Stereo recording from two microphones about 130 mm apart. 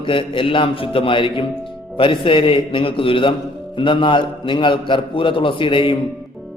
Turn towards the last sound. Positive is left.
turn(degrees=40)  # may be behind; listen again after turning